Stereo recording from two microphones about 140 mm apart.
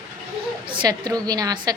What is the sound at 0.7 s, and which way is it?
A woman's voice, 30° right (ahead or behind).